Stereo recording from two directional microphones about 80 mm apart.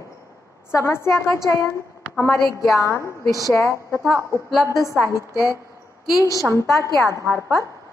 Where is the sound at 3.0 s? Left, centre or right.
Right.